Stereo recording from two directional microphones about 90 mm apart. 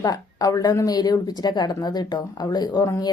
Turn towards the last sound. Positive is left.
turn(degrees=50)  # may be behind; listen again after turning